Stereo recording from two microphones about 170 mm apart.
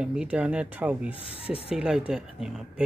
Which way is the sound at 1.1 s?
35° left (ahead or behind).